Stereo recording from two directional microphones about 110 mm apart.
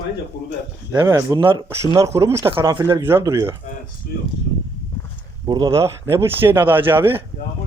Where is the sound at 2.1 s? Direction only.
30° right (ahead or behind).